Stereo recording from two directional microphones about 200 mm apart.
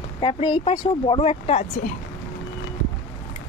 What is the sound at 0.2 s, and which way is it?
Speech, 25° left (ahead or behind).